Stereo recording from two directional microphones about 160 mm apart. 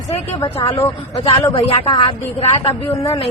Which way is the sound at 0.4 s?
35° left (ahead or behind).